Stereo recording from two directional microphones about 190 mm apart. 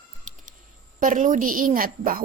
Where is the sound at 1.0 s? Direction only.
45° right (ahead or behind).